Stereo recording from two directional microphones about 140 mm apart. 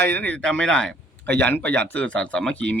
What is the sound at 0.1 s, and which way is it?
Speech, 10° left (ahead or behind).